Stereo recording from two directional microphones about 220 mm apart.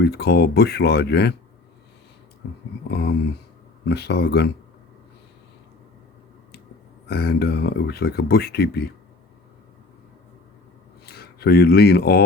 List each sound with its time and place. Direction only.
0.0 s speech: 45° left (ahead or behind)
3.8 s speech: 50° left (ahead or behind)
7.1 s speech: 45° left (ahead or behind)
11.0 s speech: 45° left (ahead or behind)